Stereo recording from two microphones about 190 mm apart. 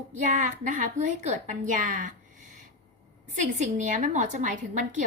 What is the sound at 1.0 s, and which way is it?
A woman's voice, 35° right (ahead or behind).